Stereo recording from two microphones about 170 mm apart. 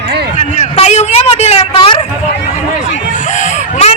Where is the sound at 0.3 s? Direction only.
40° left (ahead or behind).